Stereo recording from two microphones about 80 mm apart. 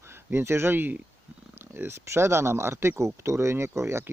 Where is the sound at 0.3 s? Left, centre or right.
Right.